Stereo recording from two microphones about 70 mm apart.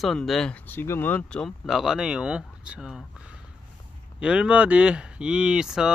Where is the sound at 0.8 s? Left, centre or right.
Left.